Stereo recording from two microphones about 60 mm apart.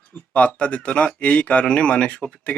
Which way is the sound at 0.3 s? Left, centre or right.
Centre.